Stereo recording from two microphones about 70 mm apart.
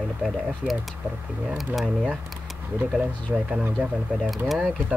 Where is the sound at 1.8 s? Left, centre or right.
Centre.